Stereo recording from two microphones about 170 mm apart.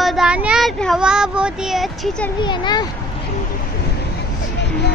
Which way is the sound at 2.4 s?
25° left (ahead or behind).